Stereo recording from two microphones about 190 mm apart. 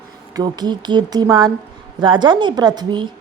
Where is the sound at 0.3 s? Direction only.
20° right (ahead or behind).